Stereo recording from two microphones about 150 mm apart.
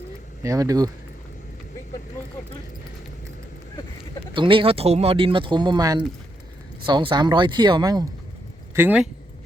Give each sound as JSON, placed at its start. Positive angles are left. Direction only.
{"t": 0.4, "sound": "speech", "side_deg": -20}
{"t": 4.4, "sound": "speech", "side_deg": -35}
{"t": 8.7, "sound": "speech", "side_deg": -10}